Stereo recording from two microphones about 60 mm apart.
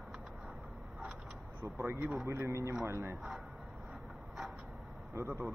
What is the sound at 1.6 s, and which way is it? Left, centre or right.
Speech, right.